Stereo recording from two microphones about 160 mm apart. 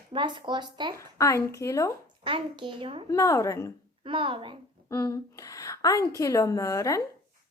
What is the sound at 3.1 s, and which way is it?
Speech, 20° left (ahead or behind).